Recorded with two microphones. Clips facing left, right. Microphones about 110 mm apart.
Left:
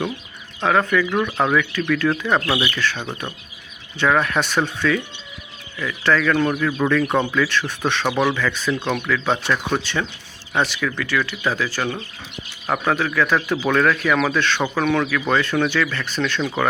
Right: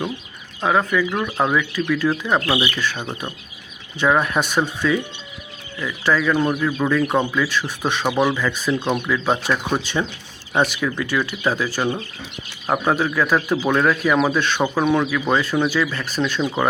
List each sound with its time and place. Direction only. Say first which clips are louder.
0.6 s speech: left 1 dB; 10° right (ahead or behind)